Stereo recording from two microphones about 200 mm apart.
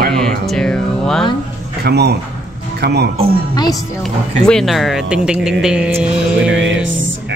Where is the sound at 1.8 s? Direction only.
55° right (ahead or behind).